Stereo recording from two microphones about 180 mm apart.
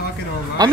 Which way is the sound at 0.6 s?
20° right (ahead or behind).